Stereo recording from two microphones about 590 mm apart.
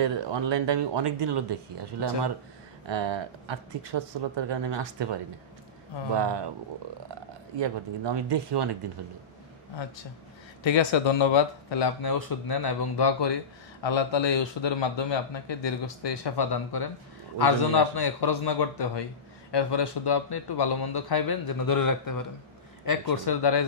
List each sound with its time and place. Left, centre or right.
0.0 s speech: right
6.1 s speech: right
7.6 s speech: right
10.6 s a man's voice: left